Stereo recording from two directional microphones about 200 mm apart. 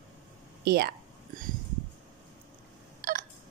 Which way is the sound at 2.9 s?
45° right (ahead or behind).